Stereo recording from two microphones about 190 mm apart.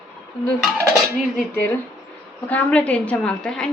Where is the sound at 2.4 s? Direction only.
10° left (ahead or behind).